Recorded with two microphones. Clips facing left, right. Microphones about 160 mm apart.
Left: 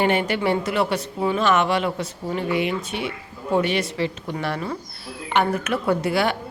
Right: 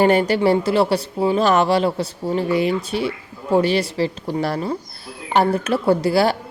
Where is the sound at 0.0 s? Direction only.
40° right (ahead or behind).